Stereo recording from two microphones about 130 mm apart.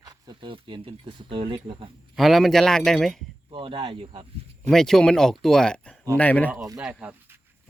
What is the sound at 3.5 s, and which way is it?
Speech, 40° right (ahead or behind).